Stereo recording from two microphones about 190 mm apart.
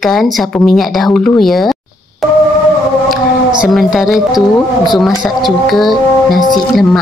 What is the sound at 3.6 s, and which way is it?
A woman's voice, centre (ahead or behind).